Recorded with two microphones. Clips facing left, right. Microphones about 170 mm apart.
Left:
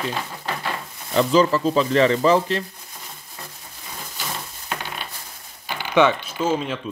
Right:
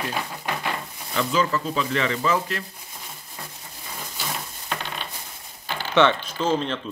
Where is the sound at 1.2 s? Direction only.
35° left (ahead or behind).